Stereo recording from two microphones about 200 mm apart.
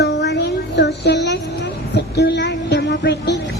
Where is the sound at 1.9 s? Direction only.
55° left (ahead or behind).